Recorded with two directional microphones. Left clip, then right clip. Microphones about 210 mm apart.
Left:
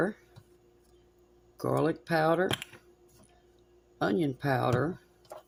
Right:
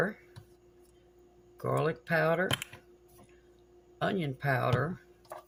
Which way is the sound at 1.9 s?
50° left (ahead or behind).